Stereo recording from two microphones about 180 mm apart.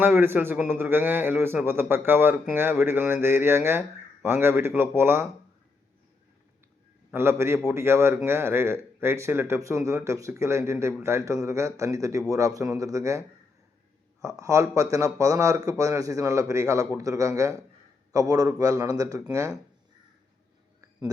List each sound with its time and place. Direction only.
0.0 s a man's voice: 10° right (ahead or behind)
7.1 s a man's voice: 15° right (ahead or behind)